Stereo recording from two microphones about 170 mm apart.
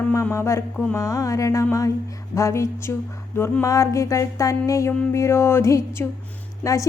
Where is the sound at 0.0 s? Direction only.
15° left (ahead or behind).